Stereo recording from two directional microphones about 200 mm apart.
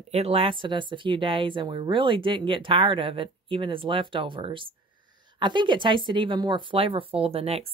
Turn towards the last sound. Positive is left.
turn(degrees=-30)  # may be behind; listen again after turning